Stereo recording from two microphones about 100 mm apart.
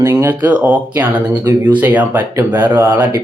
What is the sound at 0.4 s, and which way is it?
Speech, 15° right (ahead or behind).